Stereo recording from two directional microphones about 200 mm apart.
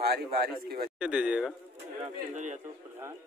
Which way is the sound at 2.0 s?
35° right (ahead or behind).